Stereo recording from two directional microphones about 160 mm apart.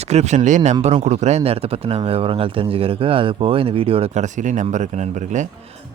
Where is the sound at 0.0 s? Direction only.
45° right (ahead or behind).